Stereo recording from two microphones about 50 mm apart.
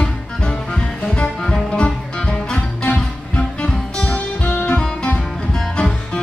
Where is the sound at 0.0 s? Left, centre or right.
Centre.